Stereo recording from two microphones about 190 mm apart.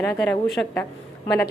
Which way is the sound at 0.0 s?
5° left (ahead or behind).